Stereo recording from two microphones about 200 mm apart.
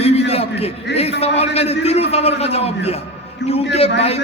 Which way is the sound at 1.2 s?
30° left (ahead or behind).